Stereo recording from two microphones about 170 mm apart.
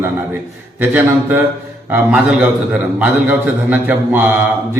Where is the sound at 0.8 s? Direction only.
10° right (ahead or behind).